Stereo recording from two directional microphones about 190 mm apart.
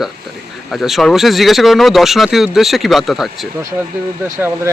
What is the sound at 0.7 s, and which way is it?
Speech, centre (ahead or behind).